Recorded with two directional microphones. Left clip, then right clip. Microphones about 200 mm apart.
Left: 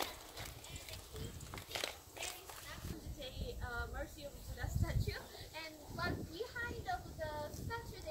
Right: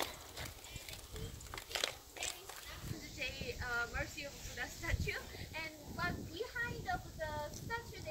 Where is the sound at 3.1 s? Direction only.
Centre (ahead or behind).